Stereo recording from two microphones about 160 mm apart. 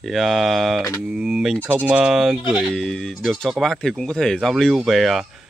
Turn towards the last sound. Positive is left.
turn(degrees=0)  # may be behind; listen again after turning